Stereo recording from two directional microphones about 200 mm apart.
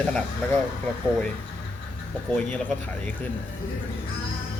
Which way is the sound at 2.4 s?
5° left (ahead or behind).